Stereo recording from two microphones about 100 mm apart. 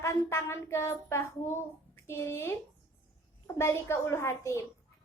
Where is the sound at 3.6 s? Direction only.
25° left (ahead or behind).